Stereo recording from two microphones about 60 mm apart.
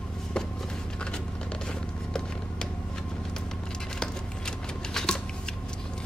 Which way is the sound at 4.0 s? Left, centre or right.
Centre.